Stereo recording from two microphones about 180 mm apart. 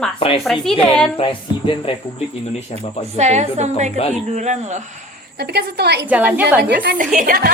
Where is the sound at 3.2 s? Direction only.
40° right (ahead or behind).